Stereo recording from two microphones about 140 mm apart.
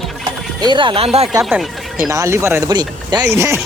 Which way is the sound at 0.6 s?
35° right (ahead or behind).